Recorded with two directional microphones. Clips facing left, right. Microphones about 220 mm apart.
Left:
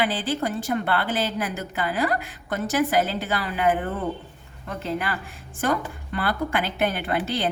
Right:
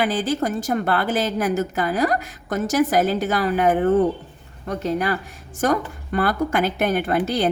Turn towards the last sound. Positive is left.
turn(degrees=-45)  # may be behind; listen again after turning